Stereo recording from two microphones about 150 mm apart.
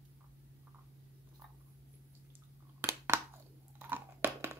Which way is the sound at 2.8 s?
15° right (ahead or behind).